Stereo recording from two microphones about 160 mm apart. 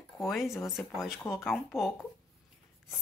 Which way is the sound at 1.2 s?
15° left (ahead or behind).